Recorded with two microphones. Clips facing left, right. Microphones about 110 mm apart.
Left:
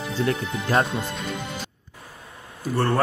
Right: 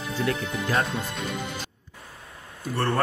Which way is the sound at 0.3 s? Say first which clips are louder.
Left 3 dB; 30° left (ahead or behind).